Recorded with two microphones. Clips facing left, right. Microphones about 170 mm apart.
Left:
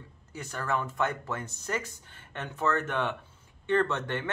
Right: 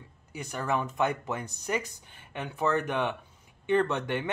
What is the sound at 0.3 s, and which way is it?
Speech, 15° right (ahead or behind).